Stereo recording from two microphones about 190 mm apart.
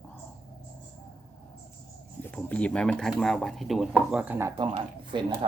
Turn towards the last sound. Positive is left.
turn(degrees=-25)  # may be behind; listen again after turning